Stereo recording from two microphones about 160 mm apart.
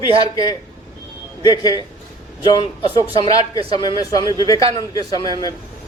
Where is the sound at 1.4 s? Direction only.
25° left (ahead or behind).